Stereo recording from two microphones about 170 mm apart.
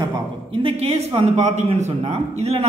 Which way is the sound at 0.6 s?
30° right (ahead or behind).